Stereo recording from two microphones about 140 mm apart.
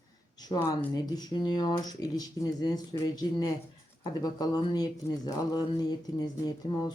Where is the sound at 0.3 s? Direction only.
30° left (ahead or behind).